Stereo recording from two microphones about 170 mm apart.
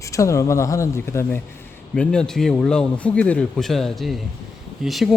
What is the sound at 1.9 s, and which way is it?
A man's voice, 5° left (ahead or behind).